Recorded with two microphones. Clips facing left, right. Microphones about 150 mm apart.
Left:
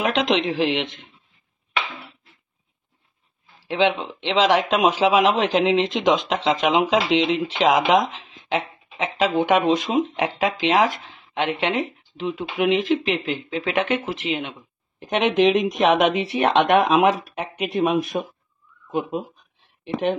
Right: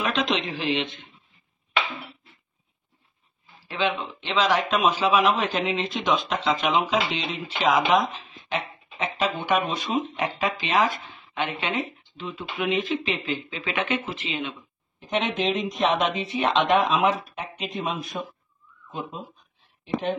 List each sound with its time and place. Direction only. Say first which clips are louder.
0.0 s speech: left 5 dB; 75° left (ahead or behind)
3.6 s speech: left 6 dB; 90° left; by 20.2 s 65° left (ahead or behind)